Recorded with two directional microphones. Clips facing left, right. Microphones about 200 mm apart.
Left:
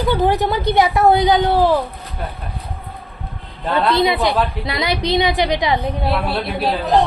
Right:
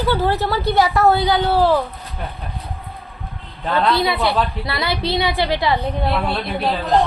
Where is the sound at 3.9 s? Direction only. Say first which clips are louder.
Left 2 dB; 20° left (ahead or behind).